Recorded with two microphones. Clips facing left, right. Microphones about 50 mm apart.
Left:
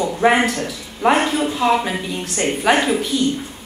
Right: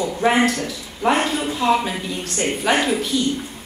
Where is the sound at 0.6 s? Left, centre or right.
Centre.